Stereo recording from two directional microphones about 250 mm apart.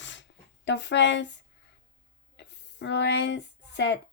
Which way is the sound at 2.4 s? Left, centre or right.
Left.